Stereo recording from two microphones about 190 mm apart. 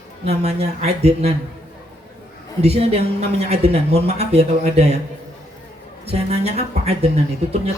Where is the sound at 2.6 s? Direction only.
35° right (ahead or behind).